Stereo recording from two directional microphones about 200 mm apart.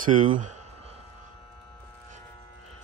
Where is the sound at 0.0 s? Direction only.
40° right (ahead or behind).